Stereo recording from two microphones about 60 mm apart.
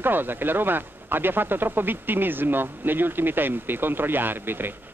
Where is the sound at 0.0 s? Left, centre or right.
Right.